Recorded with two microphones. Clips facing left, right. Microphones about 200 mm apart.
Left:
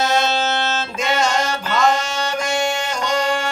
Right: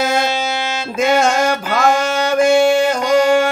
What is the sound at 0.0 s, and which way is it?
Music, 50° right (ahead or behind).